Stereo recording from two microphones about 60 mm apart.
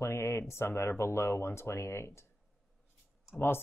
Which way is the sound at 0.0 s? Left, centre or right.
Left.